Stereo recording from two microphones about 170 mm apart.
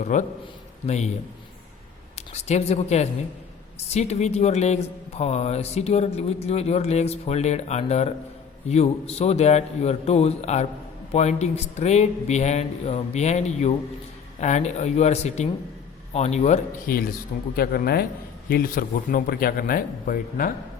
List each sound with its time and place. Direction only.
0.0 s a man's voice: 45° left (ahead or behind)
2.3 s speech: 40° left (ahead or behind)
17.6 s speech: 65° left (ahead or behind)